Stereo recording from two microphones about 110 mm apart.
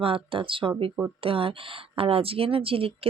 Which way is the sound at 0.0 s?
55° right (ahead or behind).